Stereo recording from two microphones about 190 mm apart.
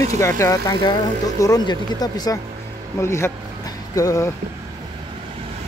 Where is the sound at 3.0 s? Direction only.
15° left (ahead or behind).